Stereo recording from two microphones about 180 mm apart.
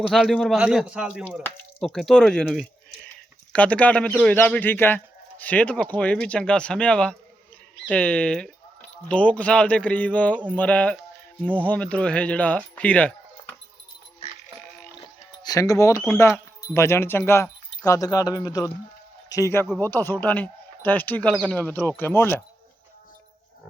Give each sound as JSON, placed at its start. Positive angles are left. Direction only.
{"t": 0.0, "sound": "speech", "side_deg": 0}
{"t": 15.4, "sound": "a man's voice", "side_deg": 20}